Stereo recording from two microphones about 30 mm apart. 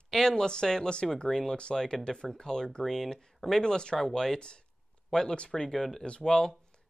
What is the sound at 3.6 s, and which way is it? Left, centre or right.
Speech, left.